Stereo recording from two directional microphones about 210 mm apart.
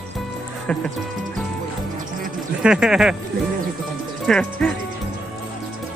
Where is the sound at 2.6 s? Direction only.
5° right (ahead or behind).